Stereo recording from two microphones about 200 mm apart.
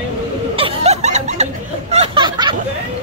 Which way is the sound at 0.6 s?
30° right (ahead or behind).